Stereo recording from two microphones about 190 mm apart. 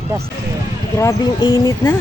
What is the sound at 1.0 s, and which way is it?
Speech, 15° left (ahead or behind).